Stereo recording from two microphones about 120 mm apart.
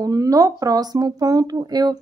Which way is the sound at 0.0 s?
30° right (ahead or behind).